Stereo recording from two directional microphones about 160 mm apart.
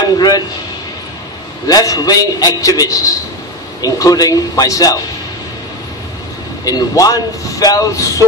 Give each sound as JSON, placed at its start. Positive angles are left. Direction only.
{"t": 0.0, "sound": "a sound", "side_deg": 25}
{"t": 1.7, "sound": "a man's voice", "side_deg": 25}
{"t": 6.6, "sound": "a man's voice", "side_deg": 20}